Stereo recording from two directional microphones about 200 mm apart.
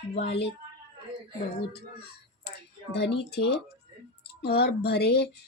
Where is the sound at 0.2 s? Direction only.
55° left (ahead or behind).